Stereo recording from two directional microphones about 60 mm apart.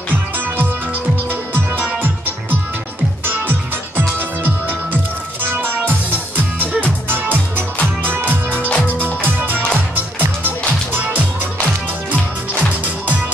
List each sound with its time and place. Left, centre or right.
1.3 s music: right
3.3 s music: right
5.5 s music: right
8.6 s music: left
8.9 s music: right
12.8 s music: right